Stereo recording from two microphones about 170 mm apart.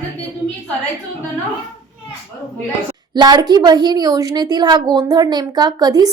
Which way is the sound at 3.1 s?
25° right (ahead or behind).